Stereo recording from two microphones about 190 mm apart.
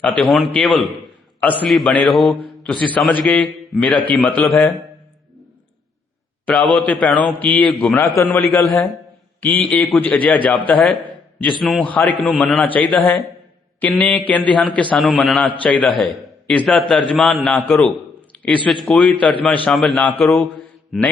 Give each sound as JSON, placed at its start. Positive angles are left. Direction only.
{"t": 0.2, "sound": "a man's voice", "side_deg": 0}
{"t": 6.5, "sound": "a man's voice", "side_deg": 5}
{"t": 8.1, "sound": "a man's voice", "side_deg": 15}